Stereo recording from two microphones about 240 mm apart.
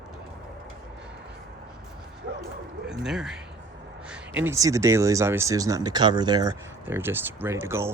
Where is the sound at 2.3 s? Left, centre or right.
Right.